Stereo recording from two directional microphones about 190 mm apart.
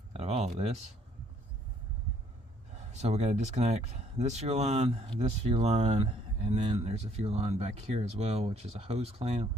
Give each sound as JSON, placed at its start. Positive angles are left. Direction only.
{"t": 0.1, "sound": "speech", "side_deg": -35}
{"t": 2.7, "sound": "speech", "side_deg": -35}